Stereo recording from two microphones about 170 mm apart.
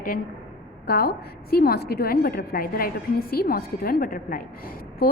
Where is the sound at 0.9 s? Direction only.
65° left (ahead or behind).